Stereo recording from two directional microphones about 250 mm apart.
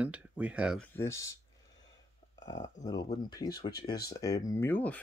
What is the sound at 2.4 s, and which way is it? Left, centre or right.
Speech, left.